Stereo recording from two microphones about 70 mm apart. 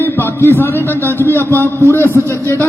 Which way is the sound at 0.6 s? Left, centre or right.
Left.